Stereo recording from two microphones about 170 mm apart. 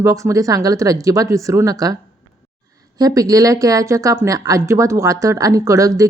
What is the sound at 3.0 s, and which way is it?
Speech, 20° right (ahead or behind).